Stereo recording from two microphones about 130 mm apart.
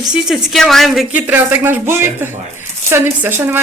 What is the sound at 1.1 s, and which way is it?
Speech, 15° right (ahead or behind).